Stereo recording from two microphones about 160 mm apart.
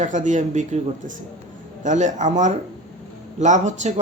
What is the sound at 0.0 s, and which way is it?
Speech, 50° right (ahead or behind).